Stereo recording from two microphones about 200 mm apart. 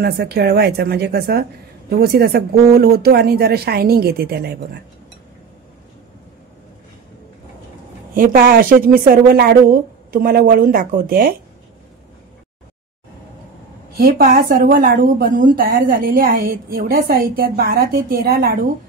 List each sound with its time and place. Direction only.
0.0 s a woman's voice: 55° right (ahead or behind)
8.1 s a woman's voice: 45° right (ahead or behind)
13.9 s a woman's voice: 50° right (ahead or behind)